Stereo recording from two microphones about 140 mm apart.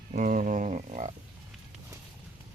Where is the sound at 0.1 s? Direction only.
70° right (ahead or behind).